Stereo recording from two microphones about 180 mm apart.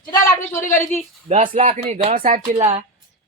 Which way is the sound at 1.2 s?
35° right (ahead or behind).